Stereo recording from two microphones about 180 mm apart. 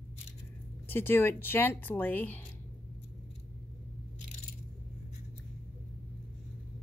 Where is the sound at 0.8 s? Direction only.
10° left (ahead or behind).